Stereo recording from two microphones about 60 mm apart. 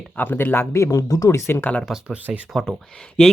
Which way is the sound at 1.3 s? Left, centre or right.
Left.